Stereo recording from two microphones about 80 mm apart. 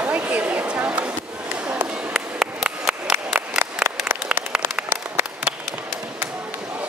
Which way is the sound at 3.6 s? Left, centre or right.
Right.